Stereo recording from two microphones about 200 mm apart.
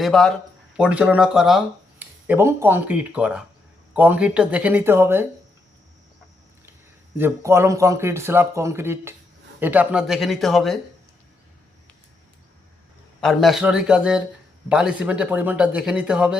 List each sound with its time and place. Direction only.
0.0 s speech: 5° left (ahead or behind)
7.2 s speech: 15° right (ahead or behind)
13.2 s speech: centre (ahead or behind)